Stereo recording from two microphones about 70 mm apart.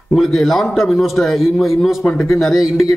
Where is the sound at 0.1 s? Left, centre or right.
Centre.